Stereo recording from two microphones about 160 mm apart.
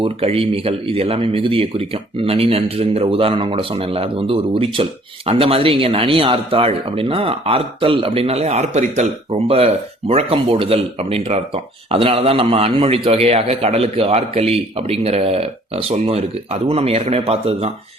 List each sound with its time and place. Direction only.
0.0 s speech: 35° right (ahead or behind)